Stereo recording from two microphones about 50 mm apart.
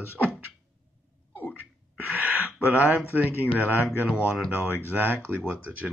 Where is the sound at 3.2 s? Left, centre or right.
Right.